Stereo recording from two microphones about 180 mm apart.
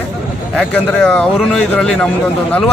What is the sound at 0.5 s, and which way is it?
A man's voice, 5° left (ahead or behind).